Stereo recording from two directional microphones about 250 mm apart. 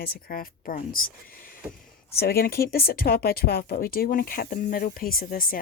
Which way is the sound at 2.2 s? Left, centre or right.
Left.